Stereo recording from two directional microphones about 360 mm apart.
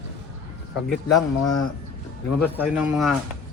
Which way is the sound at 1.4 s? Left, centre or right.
Left.